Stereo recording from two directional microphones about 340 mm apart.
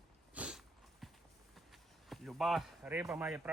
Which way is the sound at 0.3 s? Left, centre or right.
Centre.